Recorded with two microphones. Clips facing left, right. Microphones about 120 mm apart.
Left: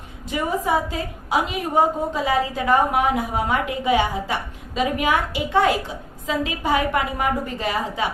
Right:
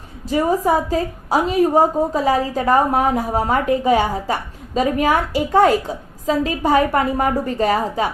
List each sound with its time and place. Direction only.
0.3 s a woman's voice: 40° right (ahead or behind)